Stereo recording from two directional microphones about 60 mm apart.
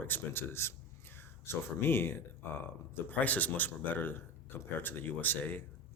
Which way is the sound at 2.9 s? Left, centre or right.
Left.